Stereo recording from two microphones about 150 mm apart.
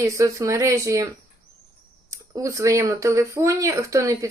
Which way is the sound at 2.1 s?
20° right (ahead or behind).